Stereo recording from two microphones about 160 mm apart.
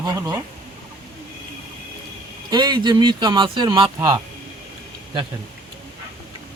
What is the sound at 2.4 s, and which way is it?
Speech, 25° right (ahead or behind).